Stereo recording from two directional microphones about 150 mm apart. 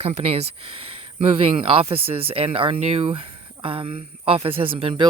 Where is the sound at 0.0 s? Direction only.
40° right (ahead or behind).